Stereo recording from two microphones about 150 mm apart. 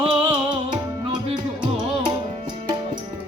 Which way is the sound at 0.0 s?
35° right (ahead or behind).